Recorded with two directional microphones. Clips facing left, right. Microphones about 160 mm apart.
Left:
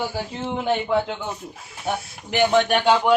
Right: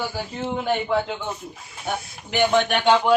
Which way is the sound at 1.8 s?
Centre (ahead or behind).